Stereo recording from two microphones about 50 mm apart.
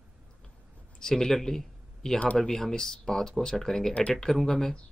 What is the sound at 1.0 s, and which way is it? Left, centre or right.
Speech, centre.